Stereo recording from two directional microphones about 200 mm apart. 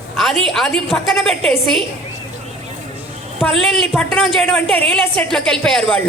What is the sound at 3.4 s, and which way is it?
A woman's voice, 5° left (ahead or behind).